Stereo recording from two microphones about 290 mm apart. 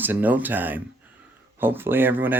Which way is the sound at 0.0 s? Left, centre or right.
Centre.